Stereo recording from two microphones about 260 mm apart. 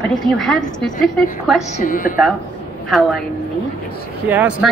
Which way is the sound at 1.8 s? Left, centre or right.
Left.